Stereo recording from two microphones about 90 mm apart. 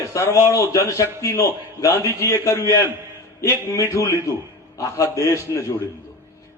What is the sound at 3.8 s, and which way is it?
A man's voice, 35° left (ahead or behind).